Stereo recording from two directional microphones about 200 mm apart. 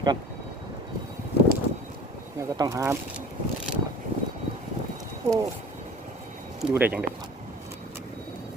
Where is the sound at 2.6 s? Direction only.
15° right (ahead or behind).